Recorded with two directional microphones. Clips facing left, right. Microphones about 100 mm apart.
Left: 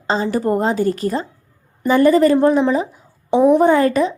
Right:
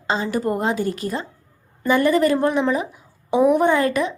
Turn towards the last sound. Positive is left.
turn(degrees=35)  # may be behind; listen again after turning